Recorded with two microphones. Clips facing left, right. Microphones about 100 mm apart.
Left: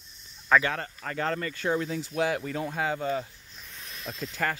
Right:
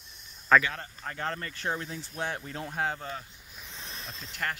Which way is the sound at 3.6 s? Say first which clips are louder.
Right 2 dB; 25° right (ahead or behind).